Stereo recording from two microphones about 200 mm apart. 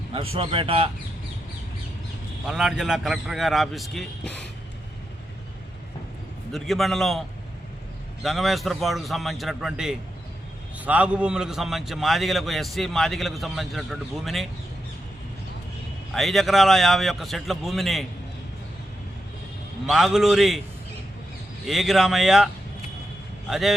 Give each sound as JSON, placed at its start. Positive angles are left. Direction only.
{"t": 0.1, "sound": "speech", "side_deg": -25}
{"t": 2.5, "sound": "a man's voice", "side_deg": 0}
{"t": 6.5, "sound": "a man's voice", "side_deg": 0}
{"t": 16.1, "sound": "a man's voice", "side_deg": 0}
{"t": 19.9, "sound": "a man's voice", "side_deg": 0}
{"t": 21.7, "sound": "a man's voice", "side_deg": 0}
{"t": 23.5, "sound": "a man's voice", "side_deg": 0}